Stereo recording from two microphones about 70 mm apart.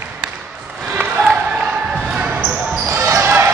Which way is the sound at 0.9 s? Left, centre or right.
Right.